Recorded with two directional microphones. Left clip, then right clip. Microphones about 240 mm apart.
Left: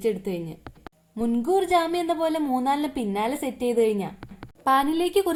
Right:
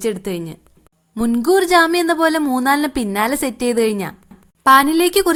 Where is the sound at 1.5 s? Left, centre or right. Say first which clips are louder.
Right 9 dB; right.